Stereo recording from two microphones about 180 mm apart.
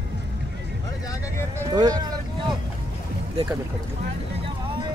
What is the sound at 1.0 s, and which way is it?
Vehicle, 15° left (ahead or behind).